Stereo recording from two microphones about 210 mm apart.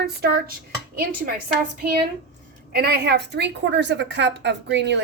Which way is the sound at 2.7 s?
50° right (ahead or behind).